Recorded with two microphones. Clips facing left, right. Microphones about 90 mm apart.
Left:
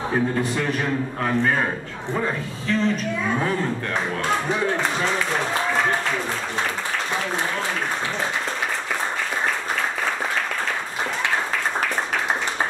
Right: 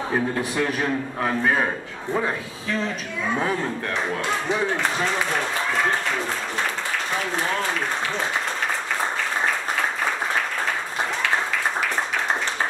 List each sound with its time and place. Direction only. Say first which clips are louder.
0.4 s speech: even; 5° right (ahead or behind)